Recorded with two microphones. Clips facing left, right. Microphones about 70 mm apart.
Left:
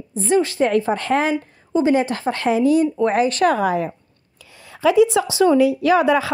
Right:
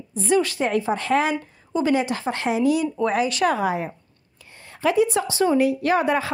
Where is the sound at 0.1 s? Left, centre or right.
Left.